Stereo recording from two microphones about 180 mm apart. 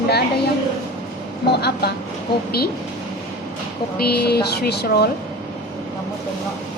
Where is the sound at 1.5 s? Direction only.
65° left (ahead or behind).